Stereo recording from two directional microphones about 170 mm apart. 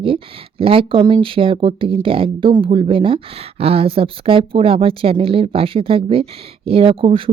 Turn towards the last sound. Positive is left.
turn(degrees=-35)  # may be behind; listen again after turning